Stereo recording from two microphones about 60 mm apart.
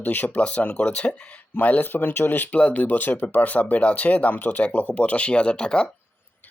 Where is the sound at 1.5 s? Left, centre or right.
Left.